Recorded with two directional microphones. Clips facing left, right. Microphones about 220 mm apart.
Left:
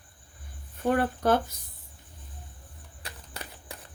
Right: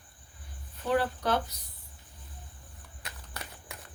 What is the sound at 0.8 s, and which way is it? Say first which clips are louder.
Speech: left 4 dB; 50° left (ahead or behind).